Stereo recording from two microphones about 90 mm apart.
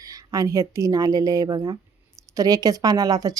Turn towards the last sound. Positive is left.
turn(degrees=-45)  # may be behind; listen again after turning